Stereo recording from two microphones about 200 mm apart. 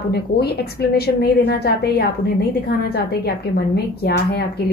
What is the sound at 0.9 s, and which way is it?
Speech, 50° left (ahead or behind).